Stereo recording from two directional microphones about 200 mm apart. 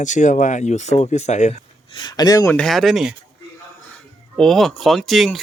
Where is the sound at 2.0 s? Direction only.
20° left (ahead or behind).